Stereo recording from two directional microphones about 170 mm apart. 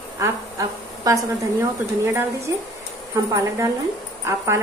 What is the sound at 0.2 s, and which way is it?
A woman's voice, 20° right (ahead or behind).